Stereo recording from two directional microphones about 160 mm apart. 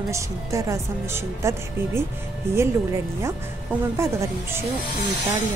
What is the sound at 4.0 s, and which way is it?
Speech, 15° right (ahead or behind).